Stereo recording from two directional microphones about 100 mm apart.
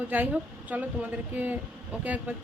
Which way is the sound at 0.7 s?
15° right (ahead or behind).